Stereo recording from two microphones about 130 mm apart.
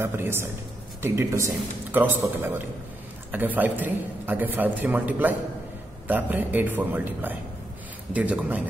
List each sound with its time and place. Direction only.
0.0 s a man's voice: 15° right (ahead or behind)